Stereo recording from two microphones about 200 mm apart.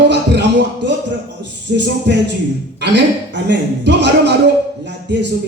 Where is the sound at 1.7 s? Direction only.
40° right (ahead or behind).